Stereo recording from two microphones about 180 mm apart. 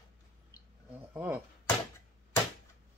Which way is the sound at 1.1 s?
10° right (ahead or behind).